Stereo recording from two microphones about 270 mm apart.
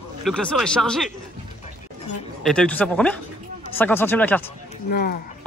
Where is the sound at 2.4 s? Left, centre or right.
Centre.